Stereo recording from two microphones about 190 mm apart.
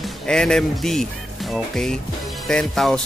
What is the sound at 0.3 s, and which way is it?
Speech, 5° left (ahead or behind).